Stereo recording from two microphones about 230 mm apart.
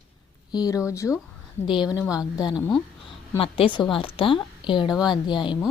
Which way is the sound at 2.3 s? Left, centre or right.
Centre.